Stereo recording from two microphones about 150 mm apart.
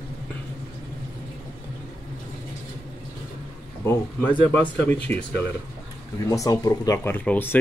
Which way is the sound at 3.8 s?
15° left (ahead or behind).